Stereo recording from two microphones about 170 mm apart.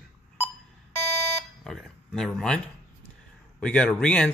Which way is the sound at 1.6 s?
Centre (ahead or behind).